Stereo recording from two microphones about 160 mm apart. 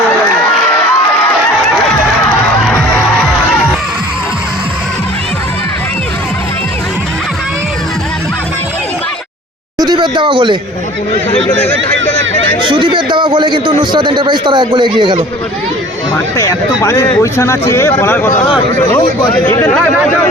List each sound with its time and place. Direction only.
9.8 s a sound: 30° right (ahead or behind)
12.6 s speech: 30° right (ahead or behind)
16.4 s speech: 20° left (ahead or behind)
19.5 s speech: 15° left (ahead or behind)